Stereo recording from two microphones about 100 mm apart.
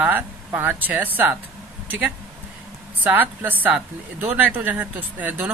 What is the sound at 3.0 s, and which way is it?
Speech, 15° right (ahead or behind).